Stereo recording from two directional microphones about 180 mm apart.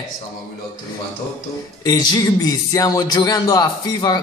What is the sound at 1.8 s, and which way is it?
Speech, 20° left (ahead or behind).